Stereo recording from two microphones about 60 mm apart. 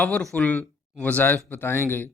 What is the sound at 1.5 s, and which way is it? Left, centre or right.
Speech, left.